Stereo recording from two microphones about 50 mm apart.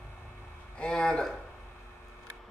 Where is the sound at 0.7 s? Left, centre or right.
Centre.